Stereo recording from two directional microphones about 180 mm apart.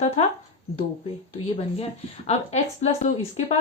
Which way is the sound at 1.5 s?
35° left (ahead or behind).